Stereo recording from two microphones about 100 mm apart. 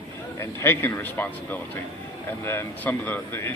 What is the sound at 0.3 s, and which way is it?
Speech, 25° left (ahead or behind).